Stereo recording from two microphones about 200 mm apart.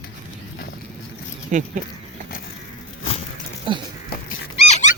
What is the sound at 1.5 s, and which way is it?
Speech, 40° right (ahead or behind).